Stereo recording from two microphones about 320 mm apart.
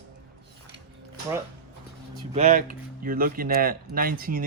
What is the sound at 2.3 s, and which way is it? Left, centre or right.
Speech, right.